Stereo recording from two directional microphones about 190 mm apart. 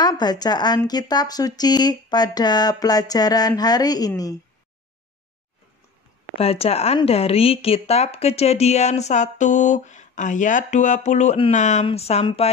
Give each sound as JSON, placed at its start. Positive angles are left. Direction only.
{"t": 0.0, "sound": "speech", "side_deg": 20}
{"t": 6.3, "sound": "speech", "side_deg": 30}